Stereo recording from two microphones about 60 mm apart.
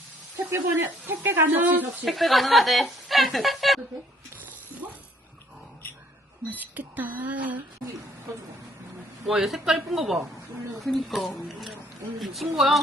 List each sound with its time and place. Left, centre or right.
0.5 s speech: right
2.0 s a woman's voice: centre
6.5 s speech: right
9.2 s a woman's voice: centre